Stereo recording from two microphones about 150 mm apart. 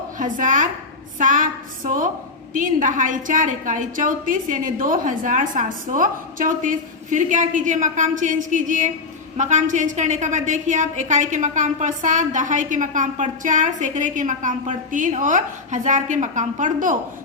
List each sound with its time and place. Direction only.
0.2 s a woman's voice: 60° right (ahead or behind)